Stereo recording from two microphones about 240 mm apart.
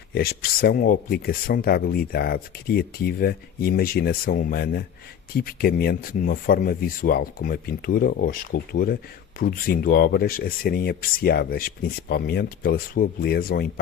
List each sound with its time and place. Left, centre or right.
0.1 s speech: left